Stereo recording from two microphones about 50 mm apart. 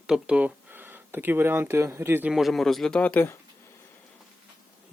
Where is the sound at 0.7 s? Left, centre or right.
Right.